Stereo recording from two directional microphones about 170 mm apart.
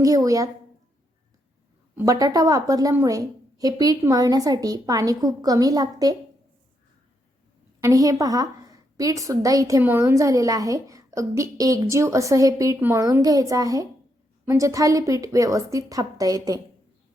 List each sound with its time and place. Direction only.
0.0 s a woman's voice: 20° right (ahead or behind)
2.0 s a woman's voice: 20° right (ahead or behind)
7.8 s a woman's voice: 20° right (ahead or behind)